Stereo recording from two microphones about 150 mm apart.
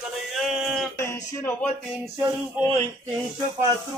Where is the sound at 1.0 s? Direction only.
15° left (ahead or behind).